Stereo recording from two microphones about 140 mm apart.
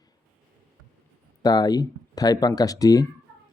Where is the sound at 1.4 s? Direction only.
30° left (ahead or behind).